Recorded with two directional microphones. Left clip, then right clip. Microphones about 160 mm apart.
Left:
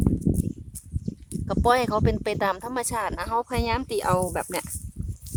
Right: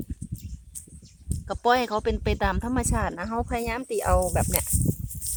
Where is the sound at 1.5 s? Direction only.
5° left (ahead or behind).